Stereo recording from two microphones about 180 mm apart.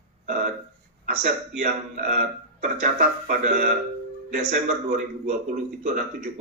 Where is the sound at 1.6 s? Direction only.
45° right (ahead or behind).